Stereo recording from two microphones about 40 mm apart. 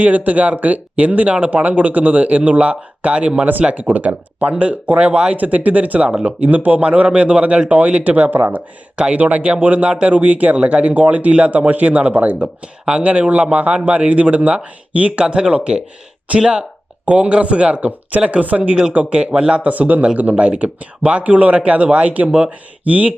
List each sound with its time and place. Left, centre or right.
0.0 s speech: right
3.8 s a man's voice: right
7.7 s speech: right
8.3 s speech: right
9.0 s a man's voice: right
10.6 s a man's voice: right
19.7 s speech: right